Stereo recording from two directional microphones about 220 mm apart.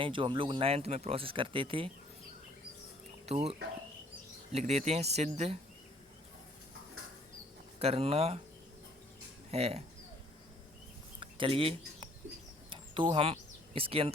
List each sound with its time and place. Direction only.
0.0 s speech: 20° right (ahead or behind)
3.2 s speech: 25° right (ahead or behind)
4.5 s speech: 30° right (ahead or behind)
7.8 s speech: 25° right (ahead or behind)
9.5 s speech: 25° right (ahead or behind)
11.2 s speech: 25° right (ahead or behind)
12.7 s a sound: 20° right (ahead or behind)